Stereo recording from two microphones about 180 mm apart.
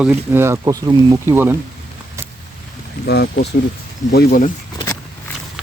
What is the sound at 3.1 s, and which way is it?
Speech, 65° left (ahead or behind).